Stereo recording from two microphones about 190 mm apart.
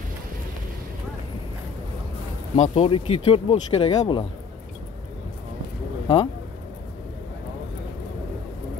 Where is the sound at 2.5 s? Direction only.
30° left (ahead or behind).